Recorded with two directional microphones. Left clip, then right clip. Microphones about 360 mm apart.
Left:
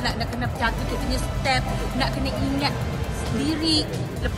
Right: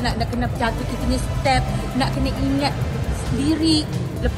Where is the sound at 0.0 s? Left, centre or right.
Centre.